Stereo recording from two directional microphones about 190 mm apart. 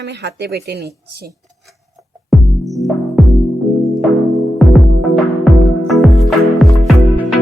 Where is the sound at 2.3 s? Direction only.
Centre (ahead or behind).